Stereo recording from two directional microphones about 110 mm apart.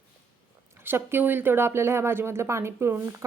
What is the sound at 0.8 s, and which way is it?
A woman's voice, 20° right (ahead or behind).